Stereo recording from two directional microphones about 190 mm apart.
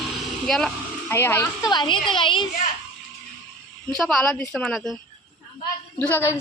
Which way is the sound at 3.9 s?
Centre (ahead or behind).